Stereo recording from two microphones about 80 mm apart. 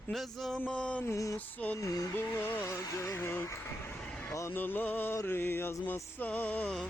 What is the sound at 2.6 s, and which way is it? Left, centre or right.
Speech, left.